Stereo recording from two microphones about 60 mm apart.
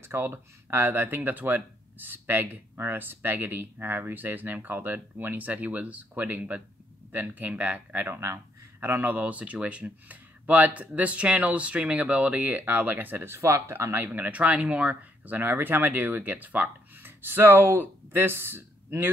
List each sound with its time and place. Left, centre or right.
0.0 s speech: right
8.1 s speech: right
8.8 s speech: right
13.9 s speech: right